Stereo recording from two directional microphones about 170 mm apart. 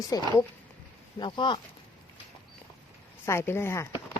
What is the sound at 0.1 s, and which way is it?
Speech, 20° left (ahead or behind).